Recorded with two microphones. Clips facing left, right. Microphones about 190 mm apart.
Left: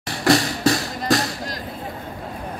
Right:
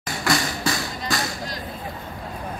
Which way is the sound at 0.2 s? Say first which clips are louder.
Left 7 dB; 35° left (ahead or behind).